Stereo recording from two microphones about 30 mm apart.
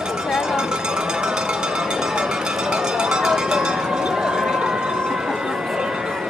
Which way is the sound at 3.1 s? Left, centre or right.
Right.